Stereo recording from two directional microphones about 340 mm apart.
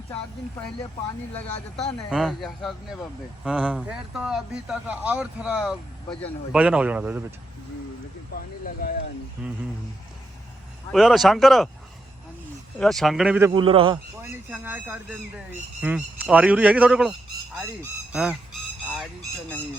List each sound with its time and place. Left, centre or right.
2.0 s speech: centre
8.6 s a sound: left
10.9 s speech: centre
12.8 s speech: centre